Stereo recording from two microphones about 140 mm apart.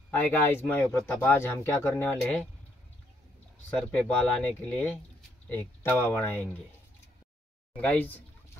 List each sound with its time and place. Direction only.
0.1 s speech: 15° left (ahead or behind)
3.7 s speech: 10° left (ahead or behind)
7.7 s speech: 10° left (ahead or behind)